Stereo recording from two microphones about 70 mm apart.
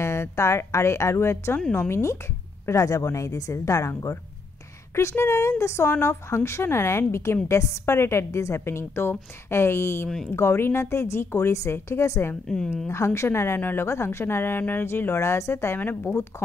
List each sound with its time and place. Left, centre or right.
0.0 s speech: left
10.0 s speech: centre
10.3 s speech: left